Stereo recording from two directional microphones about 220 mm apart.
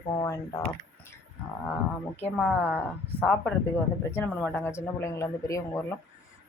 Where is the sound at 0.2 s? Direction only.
15° left (ahead or behind).